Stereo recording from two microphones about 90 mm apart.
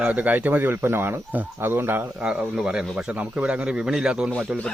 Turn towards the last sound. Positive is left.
turn(degrees=-10)  # may be behind; listen again after turning